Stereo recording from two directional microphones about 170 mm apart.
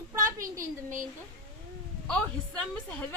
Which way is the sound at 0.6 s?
50° right (ahead or behind).